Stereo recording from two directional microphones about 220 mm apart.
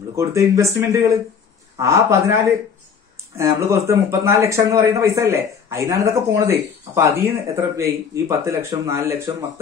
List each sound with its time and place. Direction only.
0.1 s speech: 15° right (ahead or behind)